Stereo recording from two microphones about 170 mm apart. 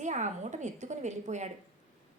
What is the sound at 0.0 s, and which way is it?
A woman's voice, 45° right (ahead or behind).